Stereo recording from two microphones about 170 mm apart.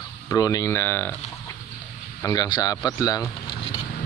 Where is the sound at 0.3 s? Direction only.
20° left (ahead or behind).